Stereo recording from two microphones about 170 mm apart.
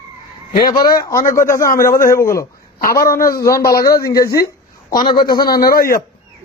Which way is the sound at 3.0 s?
55° left (ahead or behind).